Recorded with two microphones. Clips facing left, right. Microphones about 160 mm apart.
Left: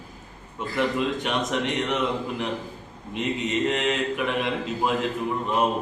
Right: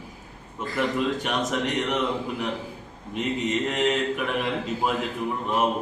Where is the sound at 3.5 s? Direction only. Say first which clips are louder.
Even; centre (ahead or behind).